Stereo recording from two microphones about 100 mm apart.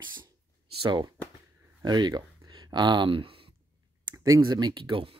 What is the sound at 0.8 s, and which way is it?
Speech, 50° right (ahead or behind).